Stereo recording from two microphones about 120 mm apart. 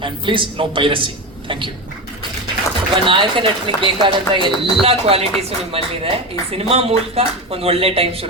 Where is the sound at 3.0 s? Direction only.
45° right (ahead or behind).